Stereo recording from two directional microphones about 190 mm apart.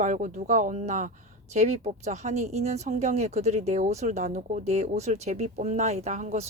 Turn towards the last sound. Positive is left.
turn(degrees=-35)  # may be behind; listen again after turning